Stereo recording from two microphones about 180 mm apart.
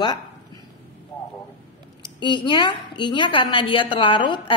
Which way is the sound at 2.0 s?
25° left (ahead or behind).